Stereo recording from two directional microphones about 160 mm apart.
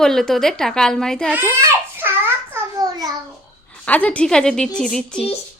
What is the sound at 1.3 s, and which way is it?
Babbling, 15° right (ahead or behind).